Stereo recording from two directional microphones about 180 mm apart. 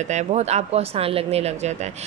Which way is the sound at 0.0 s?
40° right (ahead or behind).